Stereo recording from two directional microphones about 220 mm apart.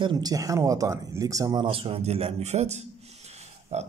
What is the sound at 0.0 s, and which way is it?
Speech, 20° right (ahead or behind).